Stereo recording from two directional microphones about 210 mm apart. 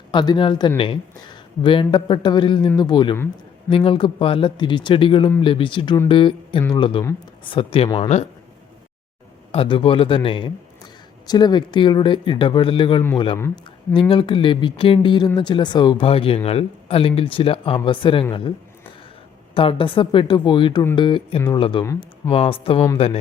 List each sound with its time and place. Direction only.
0.1 s speech: 20° left (ahead or behind)
9.5 s speech: 25° left (ahead or behind)
19.5 s speech: 25° left (ahead or behind)